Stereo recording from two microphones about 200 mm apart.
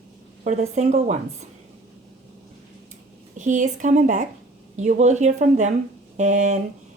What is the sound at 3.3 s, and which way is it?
Speech, 40° right (ahead or behind).